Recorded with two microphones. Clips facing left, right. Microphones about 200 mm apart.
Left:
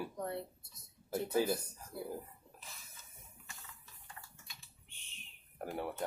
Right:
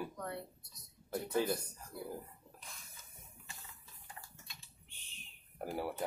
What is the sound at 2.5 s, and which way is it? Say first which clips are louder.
Spray: left 1 dB; centre (ahead or behind).